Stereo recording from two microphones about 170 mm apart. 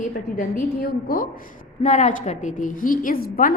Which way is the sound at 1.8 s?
45° left (ahead or behind).